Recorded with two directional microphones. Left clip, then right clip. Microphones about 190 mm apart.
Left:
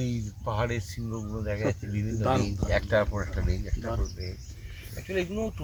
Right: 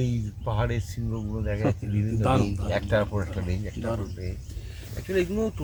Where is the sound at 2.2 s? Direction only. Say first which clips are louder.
Right 2 dB; 45° right (ahead or behind).